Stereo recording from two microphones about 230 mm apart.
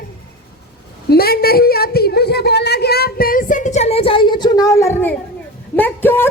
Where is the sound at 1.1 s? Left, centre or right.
Left; by 5.1 s centre.